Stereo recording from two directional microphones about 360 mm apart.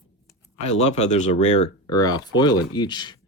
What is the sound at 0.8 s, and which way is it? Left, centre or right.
Speech, centre.